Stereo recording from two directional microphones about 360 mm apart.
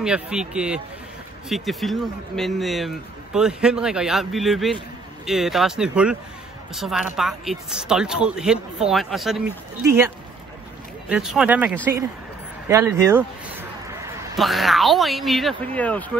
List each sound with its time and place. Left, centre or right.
0.0 s speech: centre